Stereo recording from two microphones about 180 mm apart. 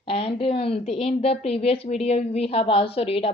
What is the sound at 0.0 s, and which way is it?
A woman's voice, 30° left (ahead or behind).